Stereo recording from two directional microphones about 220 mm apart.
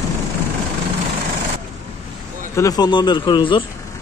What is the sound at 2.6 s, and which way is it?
Speech, 15° left (ahead or behind).